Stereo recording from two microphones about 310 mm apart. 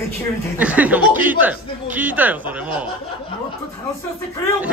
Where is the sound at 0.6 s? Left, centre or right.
Centre.